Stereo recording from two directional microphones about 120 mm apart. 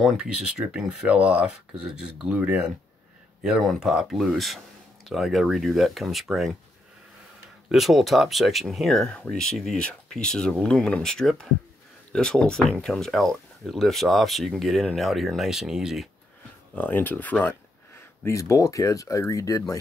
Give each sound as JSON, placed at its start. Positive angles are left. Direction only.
{"t": 0.0, "sound": "speech", "side_deg": -5}
{"t": 7.7, "sound": "speech", "side_deg": 0}
{"t": 16.7, "sound": "speech", "side_deg": 15}